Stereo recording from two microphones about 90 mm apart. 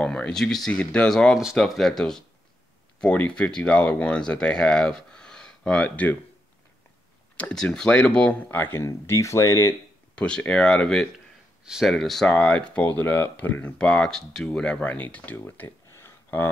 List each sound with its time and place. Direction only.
0.0 s speech: 5° left (ahead or behind)
7.3 s speech: 10° left (ahead or behind); by 9.8 s 35° left (ahead or behind)
10.1 s speech: 10° left (ahead or behind)
11.6 s speech: 5° right (ahead or behind)
11.9 s speech: 5° left (ahead or behind); by 16.4 s 25° left (ahead or behind)